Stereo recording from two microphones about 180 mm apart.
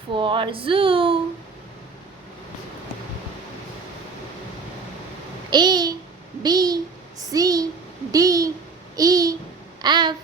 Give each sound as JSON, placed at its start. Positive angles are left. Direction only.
{"t": 0.1, "sound": "speech", "side_deg": -25}
{"t": 5.5, "sound": "babbling", "side_deg": -25}
{"t": 6.4, "sound": "a child's voice", "side_deg": -20}
{"t": 9.0, "sound": "a sound", "side_deg": -20}